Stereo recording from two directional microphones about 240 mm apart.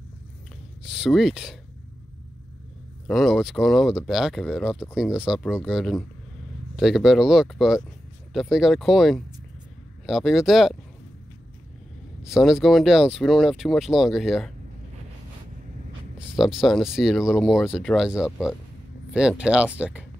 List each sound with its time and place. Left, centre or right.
0.8 s speech: centre
3.1 s speech: centre
12.2 s speech: centre
16.2 s speech: centre